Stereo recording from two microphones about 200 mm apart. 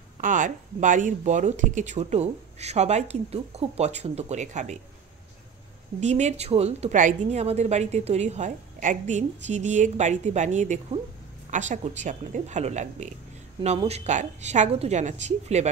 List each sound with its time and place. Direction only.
0.2 s a woman's voice: 40° right (ahead or behind)
5.9 s a woman's voice: 35° right (ahead or behind)